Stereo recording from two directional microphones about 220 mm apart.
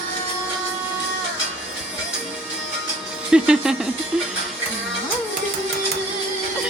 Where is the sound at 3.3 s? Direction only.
5° right (ahead or behind).